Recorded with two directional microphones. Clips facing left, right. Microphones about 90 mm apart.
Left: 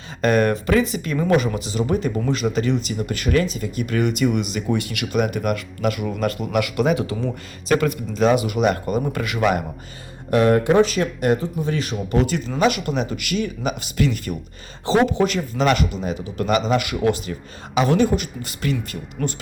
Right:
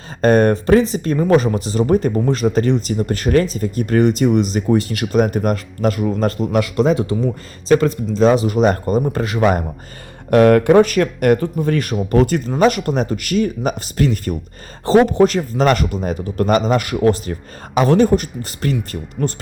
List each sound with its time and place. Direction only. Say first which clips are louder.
0.2 s speech: right 5 dB; 35° right (ahead or behind)
10.3 s speech: right 5 dB; 65° right (ahead or behind); by 19.3 s 40° right (ahead or behind)